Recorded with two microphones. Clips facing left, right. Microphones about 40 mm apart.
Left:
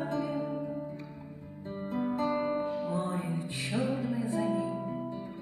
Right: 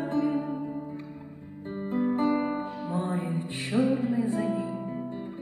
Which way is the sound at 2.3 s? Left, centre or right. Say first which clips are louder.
Right 3 dB; centre.